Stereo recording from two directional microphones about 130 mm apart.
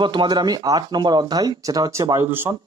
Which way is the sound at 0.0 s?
35° right (ahead or behind).